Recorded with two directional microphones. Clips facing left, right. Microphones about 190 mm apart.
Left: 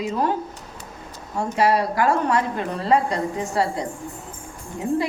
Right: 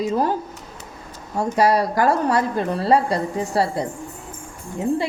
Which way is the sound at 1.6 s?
40° right (ahead or behind).